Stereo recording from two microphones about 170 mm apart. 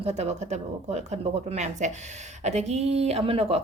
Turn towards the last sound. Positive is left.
turn(degrees=-35)  # may be behind; listen again after turning